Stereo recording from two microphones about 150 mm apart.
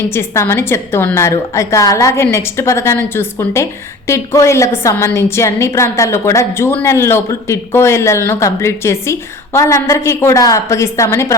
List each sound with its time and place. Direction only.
0.1 s a woman's voice: 15° left (ahead or behind)